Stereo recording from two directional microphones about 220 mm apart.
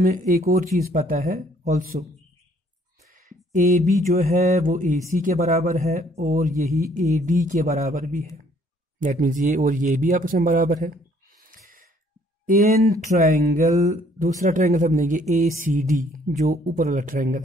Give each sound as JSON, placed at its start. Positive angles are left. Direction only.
{"t": 0.0, "sound": "speech", "side_deg": -35}
{"t": 3.5, "sound": "speech", "side_deg": -35}
{"t": 11.4, "sound": "gasp", "side_deg": -40}
{"t": 13.0, "sound": "speech", "side_deg": -35}